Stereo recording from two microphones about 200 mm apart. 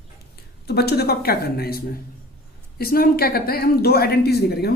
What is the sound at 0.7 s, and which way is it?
Speech, 55° left (ahead or behind).